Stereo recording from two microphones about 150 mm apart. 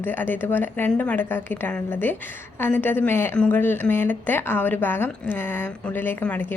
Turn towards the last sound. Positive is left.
turn(degrees=10)  # may be behind; listen again after turning